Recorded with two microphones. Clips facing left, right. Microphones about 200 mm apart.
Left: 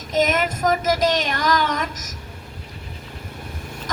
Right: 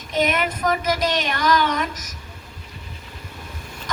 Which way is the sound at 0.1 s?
40° left (ahead or behind).